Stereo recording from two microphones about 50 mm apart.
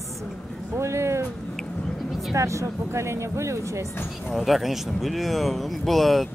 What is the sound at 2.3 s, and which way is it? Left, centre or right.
Speech, right.